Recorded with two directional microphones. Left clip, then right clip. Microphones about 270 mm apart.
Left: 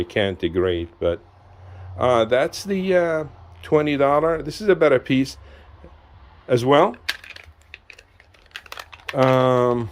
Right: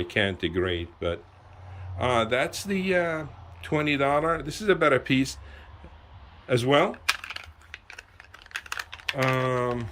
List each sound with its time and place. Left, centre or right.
0.0 s speech: centre
6.5 s speech: centre
8.5 s crumpling: centre
9.1 s speech: left